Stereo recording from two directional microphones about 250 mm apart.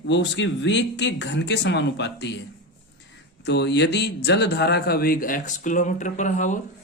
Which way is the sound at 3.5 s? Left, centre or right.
Left.